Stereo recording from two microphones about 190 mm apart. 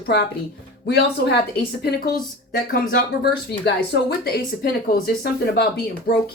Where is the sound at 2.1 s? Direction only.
45° left (ahead or behind).